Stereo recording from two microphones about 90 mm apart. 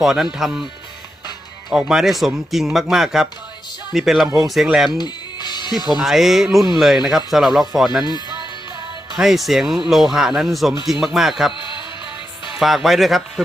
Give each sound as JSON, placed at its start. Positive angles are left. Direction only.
{"t": 0.0, "sound": "speech", "side_deg": -5}
{"t": 1.9, "sound": "speech", "side_deg": -5}
{"t": 4.9, "sound": "music", "side_deg": 55}
{"t": 6.0, "sound": "speech", "side_deg": -5}
{"t": 9.1, "sound": "speech", "side_deg": -5}
{"t": 11.5, "sound": "music", "side_deg": 65}
{"t": 12.5, "sound": "speech", "side_deg": 0}